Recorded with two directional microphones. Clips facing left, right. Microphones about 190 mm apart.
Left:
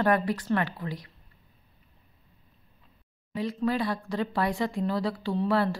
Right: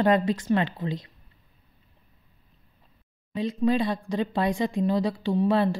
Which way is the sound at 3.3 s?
20° right (ahead or behind).